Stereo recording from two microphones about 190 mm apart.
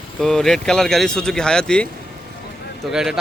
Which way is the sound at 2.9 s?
5° right (ahead or behind).